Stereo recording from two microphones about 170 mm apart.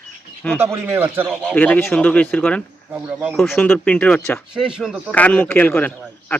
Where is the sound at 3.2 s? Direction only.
Centre (ahead or behind).